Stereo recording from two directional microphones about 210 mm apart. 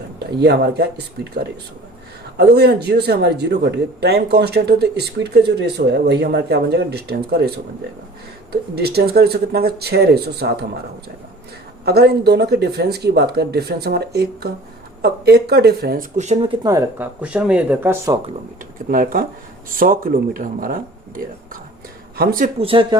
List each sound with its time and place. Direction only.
0.4 s speech: 50° right (ahead or behind)
2.4 s speech: 50° right (ahead or behind)
8.7 s speech: 50° right (ahead or behind)
11.9 s speech: 50° right (ahead or behind); by 18.2 s 10° right (ahead or behind)
18.9 s speech: 40° right (ahead or behind)
22.5 s speech: 25° right (ahead or behind)